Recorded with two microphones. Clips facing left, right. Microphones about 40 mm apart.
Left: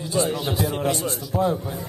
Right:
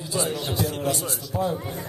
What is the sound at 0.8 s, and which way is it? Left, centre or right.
Speech, left.